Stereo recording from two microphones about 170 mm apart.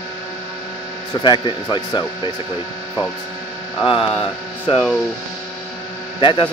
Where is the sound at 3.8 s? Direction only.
30° left (ahead or behind).